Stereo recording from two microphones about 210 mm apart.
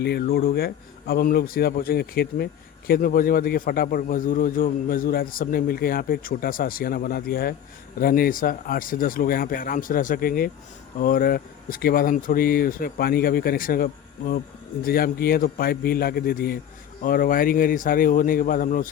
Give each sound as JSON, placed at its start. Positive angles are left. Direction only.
{"t": 0.0, "sound": "a man's voice", "side_deg": 50}